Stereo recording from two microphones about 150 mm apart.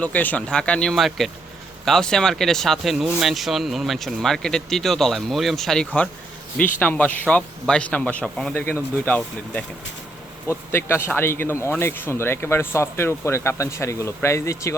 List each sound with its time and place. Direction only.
0.0 s speech: 10° left (ahead or behind)
10.7 s speech: 15° left (ahead or behind)